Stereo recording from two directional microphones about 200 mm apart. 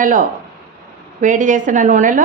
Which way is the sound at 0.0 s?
40° right (ahead or behind).